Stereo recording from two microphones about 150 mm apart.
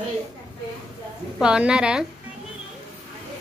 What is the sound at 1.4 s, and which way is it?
Speech, 5° right (ahead or behind).